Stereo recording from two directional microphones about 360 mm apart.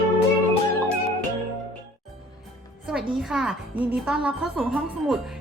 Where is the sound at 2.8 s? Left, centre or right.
Centre.